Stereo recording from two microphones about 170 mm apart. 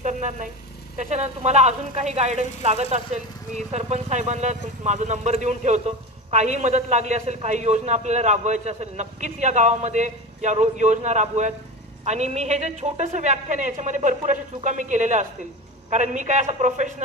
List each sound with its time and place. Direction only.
0.0 s vehicle: 45° right (ahead or behind)
0.9 s a woman's voice: 40° right (ahead or behind)